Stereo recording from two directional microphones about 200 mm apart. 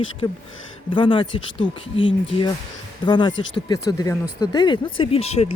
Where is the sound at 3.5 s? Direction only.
20° left (ahead or behind).